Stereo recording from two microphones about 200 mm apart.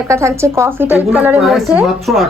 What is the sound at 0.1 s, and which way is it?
A woman's voice, 15° right (ahead or behind).